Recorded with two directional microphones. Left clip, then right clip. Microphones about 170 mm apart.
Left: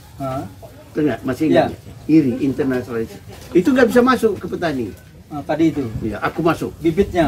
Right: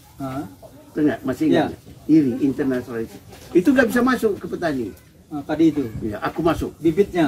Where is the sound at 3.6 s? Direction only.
10° right (ahead or behind).